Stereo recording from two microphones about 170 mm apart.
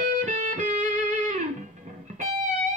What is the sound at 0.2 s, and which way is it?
Music, 50° right (ahead or behind).